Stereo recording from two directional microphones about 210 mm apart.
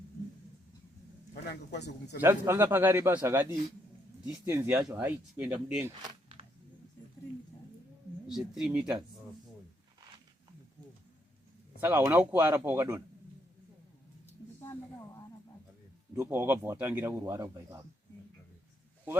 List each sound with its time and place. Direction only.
1.3 s speech: 50° left (ahead or behind)
2.2 s a man's voice: 10° right (ahead or behind)
5.9 s a sound: 25° right (ahead or behind)
8.3 s speech: centre (ahead or behind)
11.8 s a man's voice: 15° right (ahead or behind)
16.1 s a man's voice: 10° right (ahead or behind)